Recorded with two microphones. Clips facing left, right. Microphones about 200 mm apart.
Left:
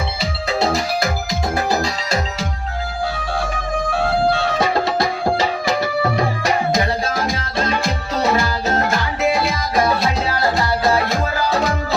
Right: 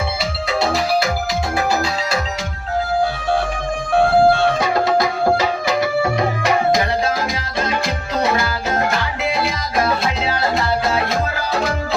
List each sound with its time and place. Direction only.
3.9 s music: 50° right (ahead or behind)